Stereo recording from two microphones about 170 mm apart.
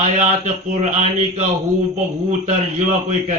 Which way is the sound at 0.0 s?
45° right (ahead or behind).